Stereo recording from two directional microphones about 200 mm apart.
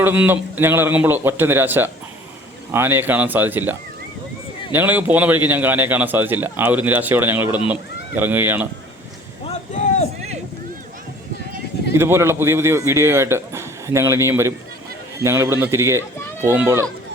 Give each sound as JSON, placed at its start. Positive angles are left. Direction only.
{"t": 0.0, "sound": "a man's voice", "side_deg": -10}
{"t": 9.5, "sound": "speech", "side_deg": 30}
{"t": 10.2, "sound": "boat", "side_deg": -35}
{"t": 11.9, "sound": "a man's voice", "side_deg": -10}